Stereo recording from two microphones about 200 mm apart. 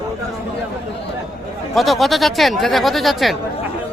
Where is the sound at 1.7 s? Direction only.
Centre (ahead or behind).